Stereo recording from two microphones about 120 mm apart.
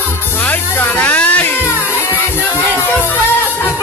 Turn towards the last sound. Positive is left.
turn(degrees=20)  # may be behind; listen again after turning